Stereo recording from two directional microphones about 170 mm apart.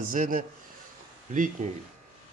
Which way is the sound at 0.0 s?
50° right (ahead or behind).